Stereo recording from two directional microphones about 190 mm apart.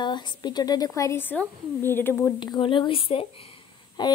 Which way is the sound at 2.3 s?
25° left (ahead or behind).